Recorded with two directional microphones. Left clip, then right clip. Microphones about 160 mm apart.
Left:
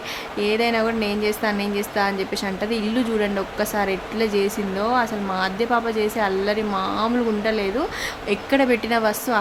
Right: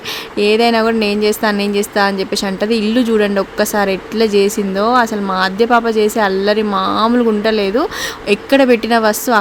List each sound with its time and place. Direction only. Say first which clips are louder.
0.3 s speech: right 9 dB; 45° right (ahead or behind)